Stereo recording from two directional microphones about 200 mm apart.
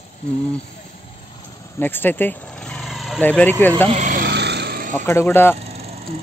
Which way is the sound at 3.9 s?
40° right (ahead or behind).